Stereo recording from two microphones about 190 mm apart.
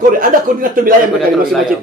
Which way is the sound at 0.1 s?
45° right (ahead or behind).